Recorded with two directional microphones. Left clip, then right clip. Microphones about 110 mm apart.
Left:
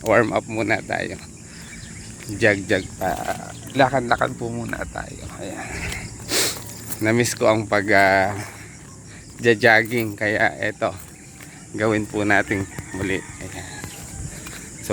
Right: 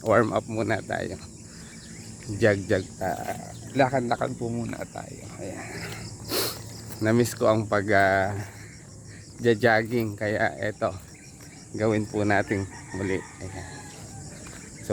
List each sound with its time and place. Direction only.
0.1 s speech: 25° right (ahead or behind)
2.4 s speech: 40° right (ahead or behind)
3.4 s speech: 25° right (ahead or behind)
9.4 s speech: 25° right (ahead or behind)
10.2 s speech: 10° right (ahead or behind); by 13.8 s 40° right (ahead or behind)